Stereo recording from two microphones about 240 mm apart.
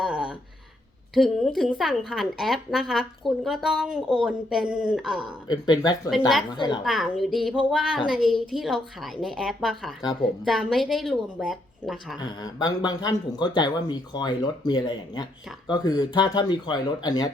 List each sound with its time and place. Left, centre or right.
0.0 s a sound: centre
1.1 s a woman's voice: centre
5.5 s speech: centre
6.8 s a woman's voice: centre
12.2 s speech: centre